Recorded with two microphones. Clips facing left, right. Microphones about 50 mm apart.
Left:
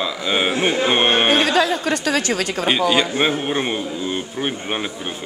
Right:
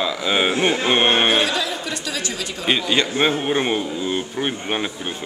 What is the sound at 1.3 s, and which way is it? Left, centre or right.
A woman's voice, left.